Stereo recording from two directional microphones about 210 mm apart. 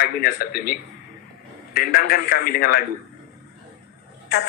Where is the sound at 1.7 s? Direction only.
45° left (ahead or behind).